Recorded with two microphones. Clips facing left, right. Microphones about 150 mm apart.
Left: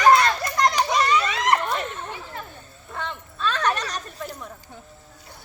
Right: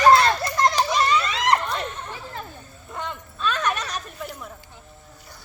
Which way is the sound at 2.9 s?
15° right (ahead or behind).